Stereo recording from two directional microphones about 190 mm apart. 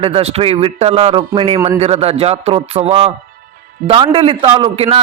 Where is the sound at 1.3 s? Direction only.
25° right (ahead or behind).